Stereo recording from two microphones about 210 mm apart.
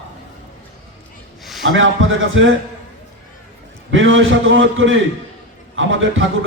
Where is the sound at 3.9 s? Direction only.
65° right (ahead or behind).